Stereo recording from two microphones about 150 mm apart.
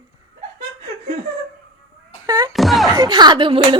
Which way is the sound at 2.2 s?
25° right (ahead or behind).